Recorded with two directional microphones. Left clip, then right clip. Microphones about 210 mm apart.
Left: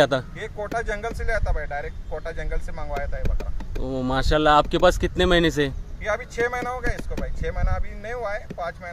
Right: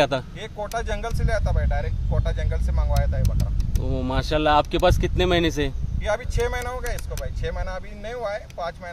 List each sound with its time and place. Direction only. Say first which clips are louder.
0.4 s speech: left 1 dB; centre (ahead or behind)
3.8 s speech: left 2 dB; 30° left (ahead or behind)
6.0 s speech: even; 5° right (ahead or behind)